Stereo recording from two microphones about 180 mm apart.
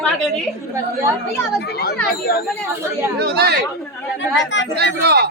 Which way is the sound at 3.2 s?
60° right (ahead or behind).